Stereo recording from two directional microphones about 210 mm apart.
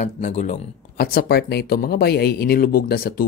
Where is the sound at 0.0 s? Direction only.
35° left (ahead or behind).